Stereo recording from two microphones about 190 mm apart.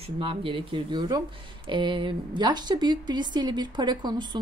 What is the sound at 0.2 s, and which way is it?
A woman's voice, 30° right (ahead or behind).